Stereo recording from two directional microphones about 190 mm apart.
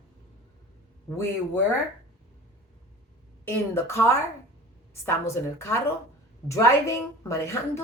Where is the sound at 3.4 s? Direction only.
15° left (ahead or behind).